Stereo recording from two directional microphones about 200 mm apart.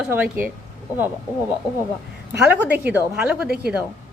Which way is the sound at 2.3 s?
10° right (ahead or behind).